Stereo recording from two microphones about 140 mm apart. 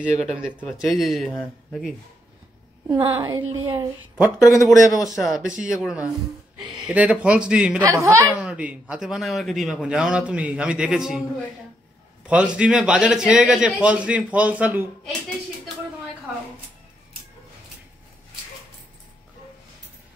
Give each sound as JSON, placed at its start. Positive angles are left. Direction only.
{"t": 0.2, "sound": "a man's voice", "side_deg": 0}
{"t": 1.3, "sound": "speech", "side_deg": 15}
{"t": 3.0, "sound": "a woman's voice", "side_deg": -40}
{"t": 3.3, "sound": "a woman's voice", "side_deg": -20}
{"t": 4.4, "sound": "a man's voice", "side_deg": 20}
{"t": 5.0, "sound": "a man's voice", "side_deg": 0}
{"t": 7.8, "sound": "a woman's voice", "side_deg": -20}
{"t": 8.4, "sound": "a man's voice", "side_deg": -10}
{"t": 12.3, "sound": "a man's voice", "side_deg": -10}